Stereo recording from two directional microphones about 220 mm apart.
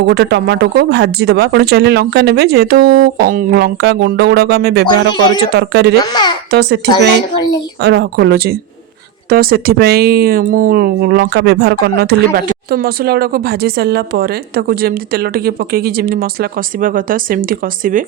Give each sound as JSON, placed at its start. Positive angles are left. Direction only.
{"t": 0.0, "sound": "speech", "side_deg": -50}
{"t": 6.0, "sound": "a child's voice", "side_deg": 20}
{"t": 6.5, "sound": "speech", "side_deg": -45}